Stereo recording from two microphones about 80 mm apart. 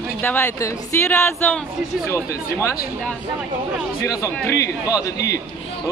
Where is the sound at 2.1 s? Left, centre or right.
Left.